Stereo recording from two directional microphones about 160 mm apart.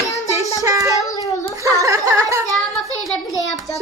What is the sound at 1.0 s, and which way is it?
Speech, 20° left (ahead or behind).